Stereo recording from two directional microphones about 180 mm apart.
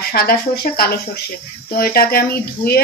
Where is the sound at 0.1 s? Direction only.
60° left (ahead or behind).